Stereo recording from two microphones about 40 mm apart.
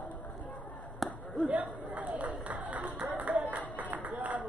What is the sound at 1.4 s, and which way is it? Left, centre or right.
Chatter, right.